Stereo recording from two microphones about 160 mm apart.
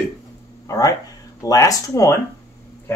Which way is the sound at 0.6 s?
20° left (ahead or behind).